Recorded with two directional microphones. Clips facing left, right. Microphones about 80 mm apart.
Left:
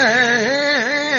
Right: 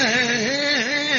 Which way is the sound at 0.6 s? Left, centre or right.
Left.